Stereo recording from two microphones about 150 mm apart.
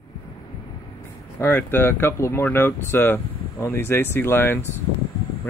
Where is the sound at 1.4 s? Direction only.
15° left (ahead or behind).